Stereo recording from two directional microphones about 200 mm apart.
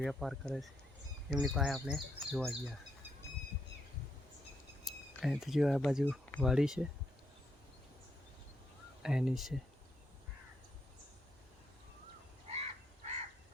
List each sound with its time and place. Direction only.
0.0 s speech: centre (ahead or behind)
4.9 s speech: centre (ahead or behind)
9.0 s speech: centre (ahead or behind)
12.5 s frog: 30° right (ahead or behind)